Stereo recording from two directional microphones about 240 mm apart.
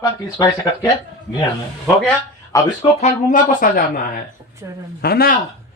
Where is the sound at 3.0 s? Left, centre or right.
Left.